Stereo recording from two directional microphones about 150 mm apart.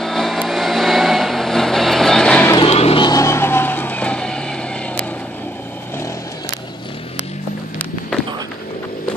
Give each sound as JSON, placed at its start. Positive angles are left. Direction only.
{"t": 0.0, "sound": "vehicle", "side_deg": 0}
{"t": 2.6, "sound": "music", "side_deg": 40}
{"t": 3.0, "sound": "vehicle", "side_deg": 25}